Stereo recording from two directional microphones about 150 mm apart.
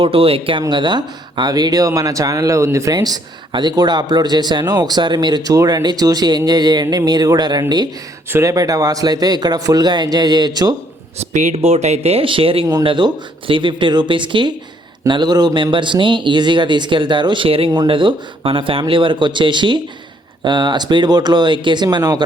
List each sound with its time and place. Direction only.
0.0 s speech: 40° right (ahead or behind)
11.2 s speech: 50° right (ahead or behind); by 22.2 s 25° right (ahead or behind)